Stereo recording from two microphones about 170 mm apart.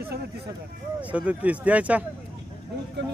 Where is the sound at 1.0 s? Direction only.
10° right (ahead or behind).